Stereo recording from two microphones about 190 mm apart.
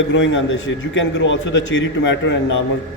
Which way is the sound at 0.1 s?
80° left.